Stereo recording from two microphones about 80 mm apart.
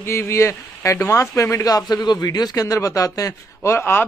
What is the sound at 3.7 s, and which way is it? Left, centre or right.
Speech, left.